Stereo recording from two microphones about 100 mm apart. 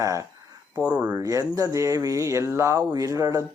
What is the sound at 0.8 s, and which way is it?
Speech, 10° right (ahead or behind).